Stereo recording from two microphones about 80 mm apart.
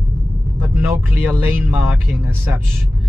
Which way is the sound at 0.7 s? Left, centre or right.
Right.